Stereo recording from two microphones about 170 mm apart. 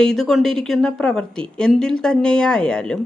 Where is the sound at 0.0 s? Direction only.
5° left (ahead or behind).